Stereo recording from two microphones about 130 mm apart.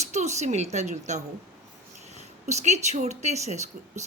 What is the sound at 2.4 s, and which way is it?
A woman's voice, 60° right (ahead or behind).